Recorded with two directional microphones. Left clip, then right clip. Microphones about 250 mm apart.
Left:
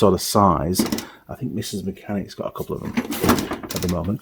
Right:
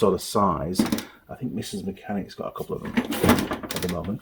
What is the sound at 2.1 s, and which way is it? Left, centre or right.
Speech, left.